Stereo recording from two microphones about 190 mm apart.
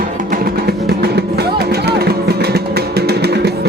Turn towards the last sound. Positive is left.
turn(degrees=-60)  # may be behind; listen again after turning